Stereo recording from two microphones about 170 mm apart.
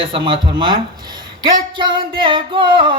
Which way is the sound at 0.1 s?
30° right (ahead or behind).